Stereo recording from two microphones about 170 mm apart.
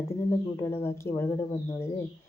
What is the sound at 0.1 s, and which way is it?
Speech, 15° left (ahead or behind).